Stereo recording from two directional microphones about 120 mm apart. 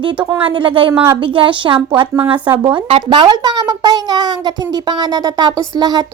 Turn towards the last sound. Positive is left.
turn(degrees=-35)  # may be behind; listen again after turning